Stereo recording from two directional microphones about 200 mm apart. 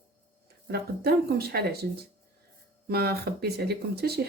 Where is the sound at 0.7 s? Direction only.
50° right (ahead or behind).